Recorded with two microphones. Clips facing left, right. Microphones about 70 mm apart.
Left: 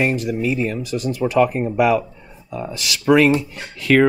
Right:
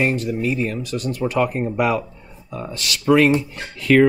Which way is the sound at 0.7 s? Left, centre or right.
Centre.